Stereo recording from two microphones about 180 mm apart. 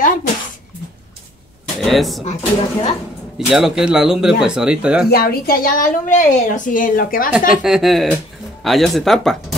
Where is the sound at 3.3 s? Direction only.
Centre (ahead or behind).